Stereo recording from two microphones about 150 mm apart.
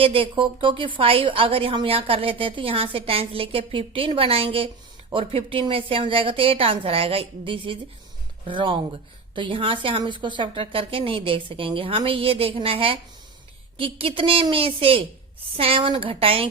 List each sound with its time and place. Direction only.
0.0 s a woman's voice: 35° right (ahead or behind)